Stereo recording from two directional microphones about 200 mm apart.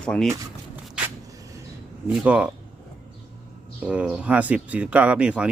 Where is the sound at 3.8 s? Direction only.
5° right (ahead or behind).